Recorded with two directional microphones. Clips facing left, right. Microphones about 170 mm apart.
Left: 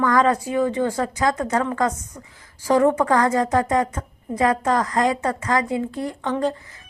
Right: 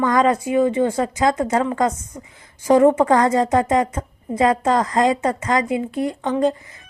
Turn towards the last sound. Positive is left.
turn(degrees=-20)  # may be behind; listen again after turning